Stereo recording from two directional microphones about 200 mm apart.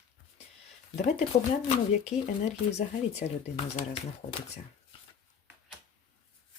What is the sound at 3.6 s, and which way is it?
Speech, 35° left (ahead or behind).